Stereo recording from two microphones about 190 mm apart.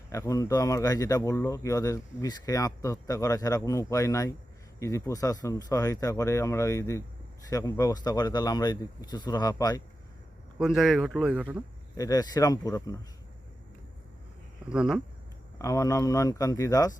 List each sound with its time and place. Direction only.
0.1 s speech: 15° left (ahead or behind)
10.6 s speech: centre (ahead or behind)
11.9 s speech: 20° left (ahead or behind)
14.7 s speech: 5° right (ahead or behind)
15.5 s speech: 15° left (ahead or behind)